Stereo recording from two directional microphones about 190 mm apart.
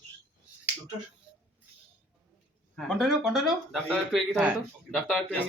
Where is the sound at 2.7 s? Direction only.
Centre (ahead or behind).